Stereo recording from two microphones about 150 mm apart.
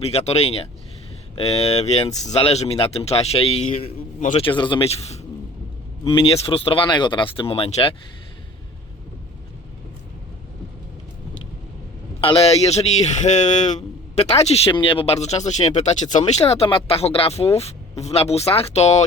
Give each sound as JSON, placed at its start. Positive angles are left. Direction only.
{"t": 0.1, "sound": "speech", "side_deg": 45}
{"t": 4.2, "sound": "a man's voice", "side_deg": 55}
{"t": 4.4, "sound": "speech", "side_deg": 30}
{"t": 12.2, "sound": "speech", "side_deg": 40}